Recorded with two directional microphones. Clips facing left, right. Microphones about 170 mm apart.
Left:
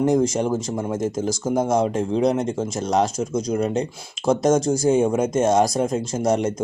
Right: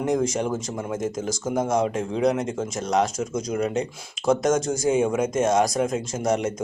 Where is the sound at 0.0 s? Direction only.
30° left (ahead or behind).